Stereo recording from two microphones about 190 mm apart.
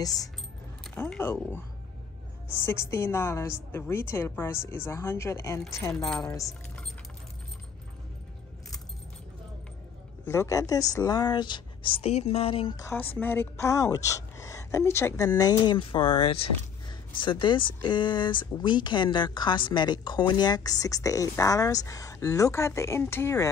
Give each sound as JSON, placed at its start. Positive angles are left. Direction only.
{"t": 0.8, "sound": "a woman's voice", "side_deg": 5}
{"t": 10.2, "sound": "speech", "side_deg": 15}
{"t": 12.8, "sound": "a woman's voice", "side_deg": 10}